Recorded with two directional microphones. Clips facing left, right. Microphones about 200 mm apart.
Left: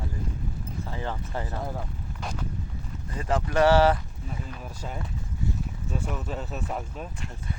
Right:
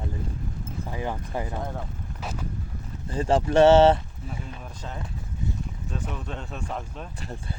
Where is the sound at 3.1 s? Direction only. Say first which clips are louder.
Right 5 dB; 30° right (ahead or behind).